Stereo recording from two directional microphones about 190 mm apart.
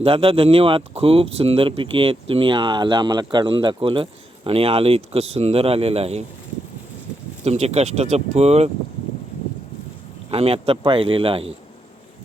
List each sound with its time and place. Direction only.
0.0 s speech: 30° right (ahead or behind)
7.4 s speech: 35° right (ahead or behind)
10.3 s speech: 30° right (ahead or behind)